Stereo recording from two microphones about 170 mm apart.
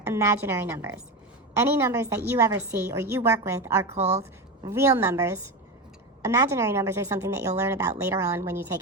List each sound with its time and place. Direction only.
0.1 s speech: 15° right (ahead or behind)
3.8 s a woman's voice: 40° right (ahead or behind)
4.6 s speech: 15° right (ahead or behind)